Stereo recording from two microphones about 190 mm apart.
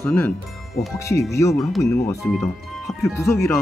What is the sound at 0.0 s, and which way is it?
Speech, 10° left (ahead or behind).